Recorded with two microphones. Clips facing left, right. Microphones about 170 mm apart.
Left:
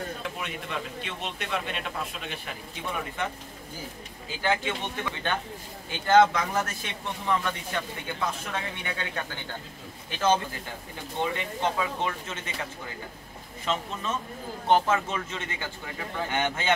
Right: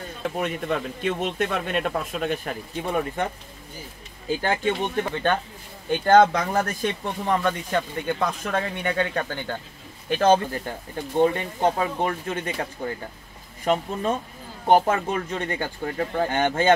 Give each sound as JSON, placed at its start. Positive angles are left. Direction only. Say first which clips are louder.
{"t": 0.2, "sound": "speech", "louder": "right 8 dB", "side_deg": -50}
{"t": 4.4, "sound": "speech", "louder": "right 3 dB", "side_deg": -45}
{"t": 6.3, "sound": "speech", "louder": "right 4 dB", "side_deg": -35}
{"t": 6.8, "sound": "speech", "louder": "right 9 dB", "side_deg": -50}
{"t": 14.7, "sound": "speech", "louder": "right 4 dB", "side_deg": -50}